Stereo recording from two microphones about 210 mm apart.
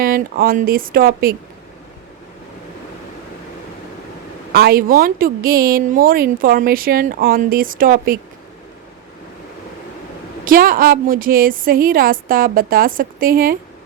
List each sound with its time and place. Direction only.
0.0 s a woman's voice: 45° right (ahead or behind)
4.5 s a woman's voice: 45° right (ahead or behind)
10.4 s a woman's voice: 40° right (ahead or behind)